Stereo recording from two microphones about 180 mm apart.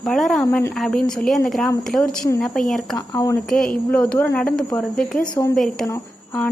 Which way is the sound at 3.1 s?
20° left (ahead or behind).